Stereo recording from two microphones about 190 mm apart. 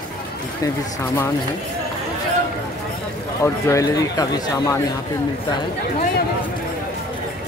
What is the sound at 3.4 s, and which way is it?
Speech, 15° left (ahead or behind).